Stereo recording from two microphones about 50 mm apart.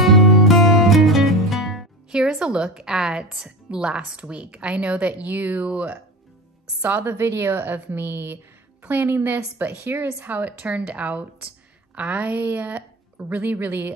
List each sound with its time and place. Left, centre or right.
0.0 s music: centre
2.0 s a woman's voice: centre
5.2 s a woman's voice: right
5.7 s speech: right
6.8 s a woman's voice: right
7.1 s a woman's voice: right